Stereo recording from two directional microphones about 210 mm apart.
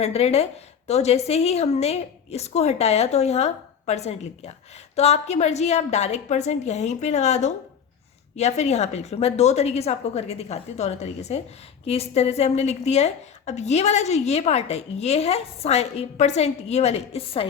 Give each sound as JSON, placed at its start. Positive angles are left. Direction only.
{"t": 0.0, "sound": "a woman's voice", "side_deg": 30}